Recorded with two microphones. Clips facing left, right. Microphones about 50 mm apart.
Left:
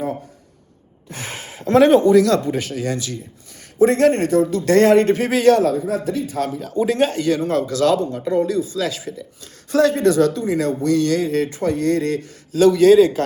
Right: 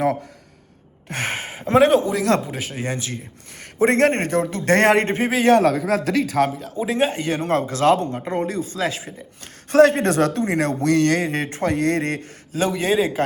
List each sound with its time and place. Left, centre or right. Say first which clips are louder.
1.0 s gasp: right 6 dB; right
1.8 s speech: left 7 dB; centre
2.7 s a man's voice: left 3 dB; right
3.2 s a man's voice: even; right
5.0 s a man's voice: left 4 dB; right
5.7 s speech: right 1 dB; right
6.6 s speech: left 3 dB; centre
7.2 s a man's voice: left 2 dB; right
12.5 s a man's voice: left 9 dB; right